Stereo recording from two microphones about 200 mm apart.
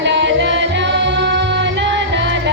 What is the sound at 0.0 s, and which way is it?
Music, 60° right (ahead or behind).